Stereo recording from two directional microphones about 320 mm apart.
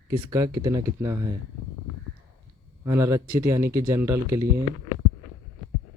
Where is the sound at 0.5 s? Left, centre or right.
Centre.